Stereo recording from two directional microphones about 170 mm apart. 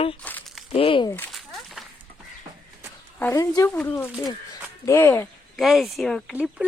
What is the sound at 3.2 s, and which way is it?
Speech, 15° left (ahead or behind).